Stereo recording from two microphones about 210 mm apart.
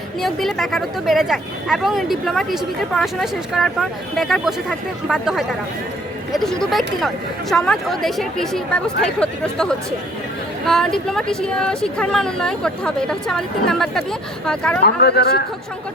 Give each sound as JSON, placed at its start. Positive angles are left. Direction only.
{"t": 0.2, "sound": "speech", "side_deg": 0}
{"t": 14.8, "sound": "speech", "side_deg": 50}